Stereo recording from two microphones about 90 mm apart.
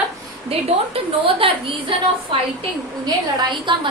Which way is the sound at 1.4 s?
90° right.